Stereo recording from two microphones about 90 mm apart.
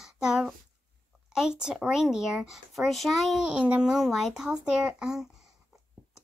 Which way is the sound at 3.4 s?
10° right (ahead or behind).